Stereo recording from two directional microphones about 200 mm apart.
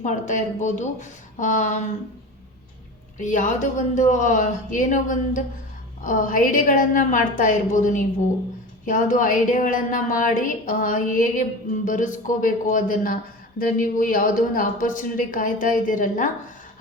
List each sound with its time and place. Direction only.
0.0 s a woman's voice: 40° left (ahead or behind)
3.2 s a woman's voice: 40° left (ahead or behind)